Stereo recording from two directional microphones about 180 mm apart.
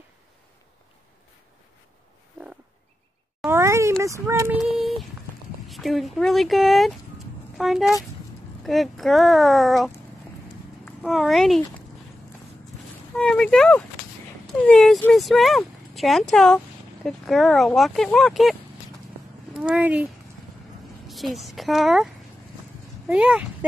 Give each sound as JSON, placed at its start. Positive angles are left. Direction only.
{"t": 3.4, "sound": "a sound", "side_deg": -15}
{"t": 4.0, "sound": "speech", "side_deg": -15}
{"t": 4.6, "sound": "child singing", "side_deg": 0}
{"t": 5.7, "sound": "speech", "side_deg": 0}
{"t": 11.0, "sound": "speech", "side_deg": 0}
{"t": 13.2, "sound": "speech", "side_deg": 5}
{"t": 21.1, "sound": "speech", "side_deg": 0}